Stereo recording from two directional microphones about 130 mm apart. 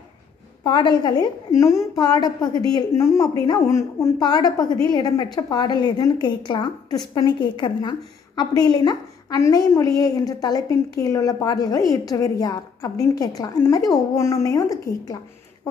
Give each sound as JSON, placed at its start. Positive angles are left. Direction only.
{"t": 0.7, "sound": "a woman's voice", "side_deg": 35}
{"t": 1.5, "sound": "a woman's voice", "side_deg": 20}
{"t": 2.9, "sound": "a woman's voice", "side_deg": 20}